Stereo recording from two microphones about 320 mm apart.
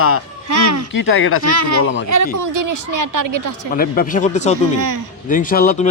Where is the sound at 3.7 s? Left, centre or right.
Left.